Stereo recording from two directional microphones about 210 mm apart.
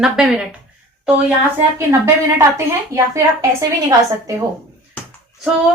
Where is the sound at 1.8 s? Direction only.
10° right (ahead or behind).